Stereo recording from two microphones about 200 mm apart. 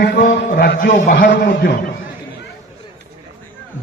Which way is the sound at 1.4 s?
45° left (ahead or behind).